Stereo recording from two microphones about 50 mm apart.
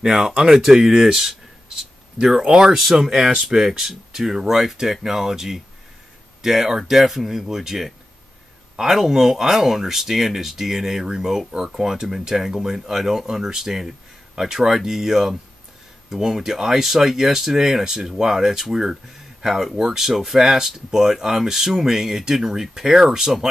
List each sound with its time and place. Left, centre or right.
0.0 s speech: centre
1.8 s a sound: centre
2.4 s speech: centre
2.8 s speech: centre